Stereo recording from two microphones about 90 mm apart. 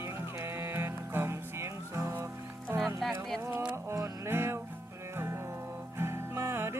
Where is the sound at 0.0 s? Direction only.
30° right (ahead or behind).